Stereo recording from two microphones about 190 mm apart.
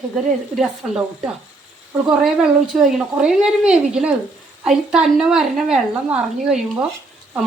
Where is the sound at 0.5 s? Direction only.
5° right (ahead or behind).